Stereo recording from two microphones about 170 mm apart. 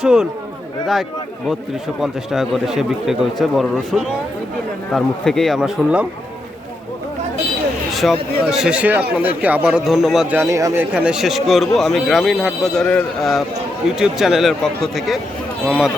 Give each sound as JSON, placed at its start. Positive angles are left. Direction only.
{"t": 0.0, "sound": "a man's voice", "side_deg": 0}
{"t": 2.0, "sound": "a man's voice", "side_deg": 0}
{"t": 7.9, "sound": "a man's voice", "side_deg": 0}
{"t": 10.9, "sound": "a man's voice", "side_deg": -5}